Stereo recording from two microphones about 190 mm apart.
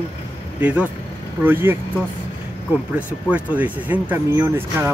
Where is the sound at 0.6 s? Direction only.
5° right (ahead or behind).